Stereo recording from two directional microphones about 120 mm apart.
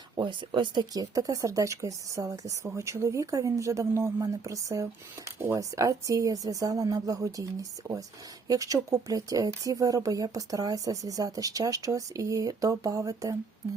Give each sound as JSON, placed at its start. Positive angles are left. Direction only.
{"t": 0.2, "sound": "speech", "side_deg": -40}